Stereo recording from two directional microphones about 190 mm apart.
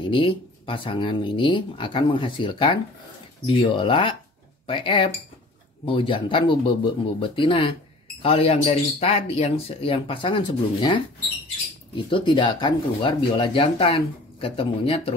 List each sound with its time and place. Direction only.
0.0 s speech: 25° left (ahead or behind)